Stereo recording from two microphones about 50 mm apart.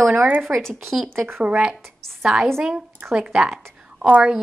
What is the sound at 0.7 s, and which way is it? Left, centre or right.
Speech, centre.